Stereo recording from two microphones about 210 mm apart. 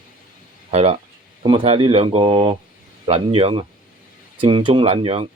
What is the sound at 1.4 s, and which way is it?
Speech, 25° right (ahead or behind).